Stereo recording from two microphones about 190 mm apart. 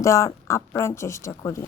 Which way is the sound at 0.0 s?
15° left (ahead or behind).